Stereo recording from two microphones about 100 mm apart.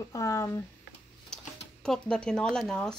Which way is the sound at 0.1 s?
30° left (ahead or behind).